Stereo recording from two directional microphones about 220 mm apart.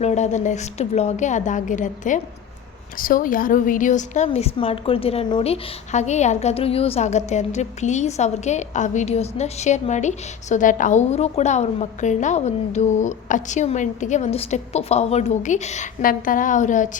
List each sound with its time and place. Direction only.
0.0 s a woman's voice: 30° left (ahead or behind)